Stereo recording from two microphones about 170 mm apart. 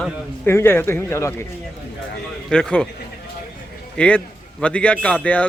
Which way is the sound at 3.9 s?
5° left (ahead or behind).